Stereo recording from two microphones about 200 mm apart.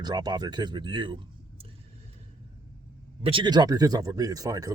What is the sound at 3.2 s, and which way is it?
Speech, 25° right (ahead or behind).